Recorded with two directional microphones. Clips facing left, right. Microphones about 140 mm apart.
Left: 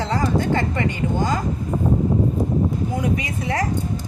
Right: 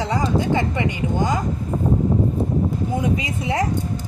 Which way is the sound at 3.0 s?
25° right (ahead or behind).